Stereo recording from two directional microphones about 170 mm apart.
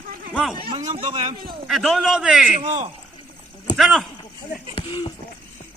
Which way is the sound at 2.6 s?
45° right (ahead or behind).